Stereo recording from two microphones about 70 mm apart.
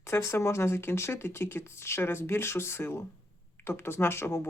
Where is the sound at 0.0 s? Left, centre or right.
Left.